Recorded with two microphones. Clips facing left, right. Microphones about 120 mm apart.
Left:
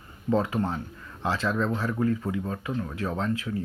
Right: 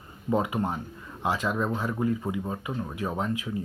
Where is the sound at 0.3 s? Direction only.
15° right (ahead or behind).